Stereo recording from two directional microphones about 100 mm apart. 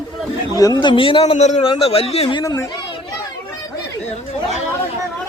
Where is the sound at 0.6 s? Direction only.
40° left (ahead or behind); by 2.3 s 75° left (ahead or behind).